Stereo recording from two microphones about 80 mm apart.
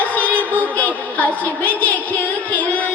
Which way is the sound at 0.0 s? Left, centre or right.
Centre.